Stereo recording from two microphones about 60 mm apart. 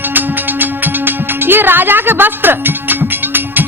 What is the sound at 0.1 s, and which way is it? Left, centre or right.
Music, right.